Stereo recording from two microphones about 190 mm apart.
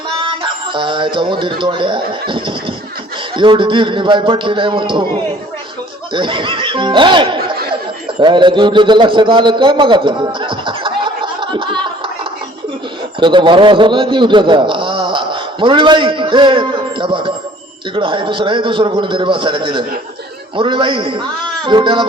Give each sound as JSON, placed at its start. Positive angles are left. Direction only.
{"t": 0.2, "sound": "a man's voice", "side_deg": -25}
{"t": 13.1, "sound": "a man's voice", "side_deg": -25}